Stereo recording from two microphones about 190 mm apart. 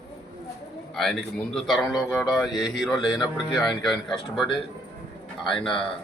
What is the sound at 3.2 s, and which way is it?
Speech, 20° left (ahead or behind).